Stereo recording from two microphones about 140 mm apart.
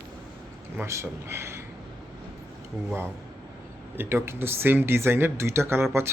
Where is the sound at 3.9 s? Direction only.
15° right (ahead or behind).